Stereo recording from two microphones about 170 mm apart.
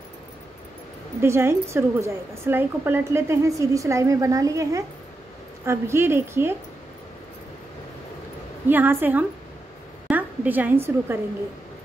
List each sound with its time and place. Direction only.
1.2 s a woman's voice: 15° right (ahead or behind)
8.6 s a woman's voice: 10° right (ahead or behind)